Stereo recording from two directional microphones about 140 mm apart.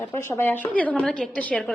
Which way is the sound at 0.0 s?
15° left (ahead or behind).